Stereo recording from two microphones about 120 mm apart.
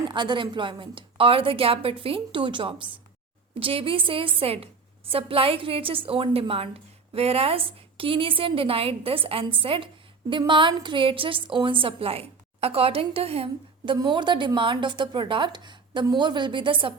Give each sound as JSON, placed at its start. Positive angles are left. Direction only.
{"t": 0.1, "sound": "a woman's voice", "side_deg": -40}